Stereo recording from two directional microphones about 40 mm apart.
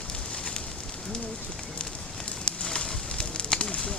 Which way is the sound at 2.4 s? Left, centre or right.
Left.